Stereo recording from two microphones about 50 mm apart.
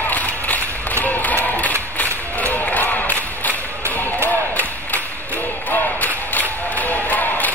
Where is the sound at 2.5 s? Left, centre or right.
Left.